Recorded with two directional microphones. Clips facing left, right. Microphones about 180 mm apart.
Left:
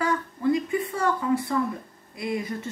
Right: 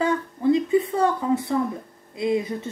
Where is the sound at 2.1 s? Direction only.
20° right (ahead or behind).